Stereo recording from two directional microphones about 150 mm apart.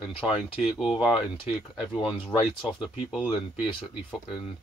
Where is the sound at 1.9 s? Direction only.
30° left (ahead or behind).